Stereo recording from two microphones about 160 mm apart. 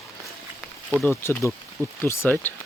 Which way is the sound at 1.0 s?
15° left (ahead or behind).